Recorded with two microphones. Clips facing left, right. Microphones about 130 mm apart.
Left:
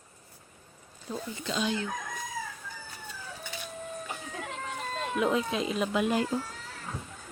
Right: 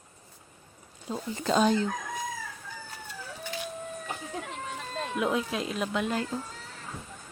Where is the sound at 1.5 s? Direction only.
45° right (ahead or behind).